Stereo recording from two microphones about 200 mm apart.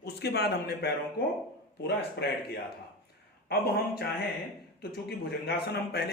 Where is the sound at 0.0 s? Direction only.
55° left (ahead or behind).